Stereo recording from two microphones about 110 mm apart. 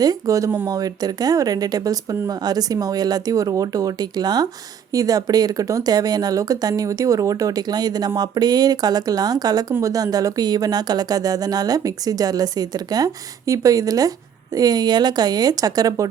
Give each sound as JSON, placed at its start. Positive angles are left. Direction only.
{"t": 0.0, "sound": "speech", "side_deg": -35}